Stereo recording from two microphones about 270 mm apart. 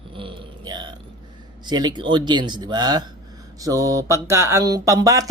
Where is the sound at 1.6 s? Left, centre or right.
Centre.